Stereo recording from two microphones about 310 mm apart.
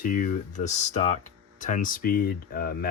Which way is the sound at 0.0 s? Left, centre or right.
Left.